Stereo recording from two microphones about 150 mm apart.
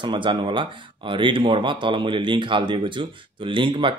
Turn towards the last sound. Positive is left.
turn(degrees=-35)  # may be behind; listen again after turning